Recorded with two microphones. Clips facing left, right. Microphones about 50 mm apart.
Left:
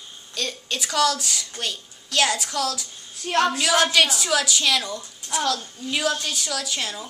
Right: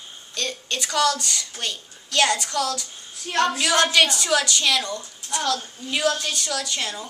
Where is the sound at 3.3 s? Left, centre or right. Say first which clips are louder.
Left 2 dB; left.